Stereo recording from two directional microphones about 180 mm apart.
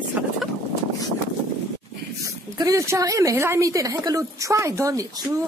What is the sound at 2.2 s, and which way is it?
Speech, 20° right (ahead or behind).